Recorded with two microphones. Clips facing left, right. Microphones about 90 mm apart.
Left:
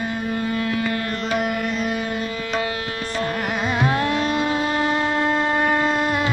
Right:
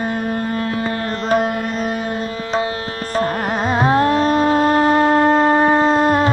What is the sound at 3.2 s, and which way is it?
Carnatic music, 40° right (ahead or behind).